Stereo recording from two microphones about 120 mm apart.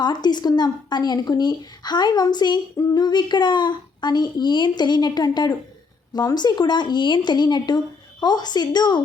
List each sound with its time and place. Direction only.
0.0 s a child's voice: 35° left (ahead or behind)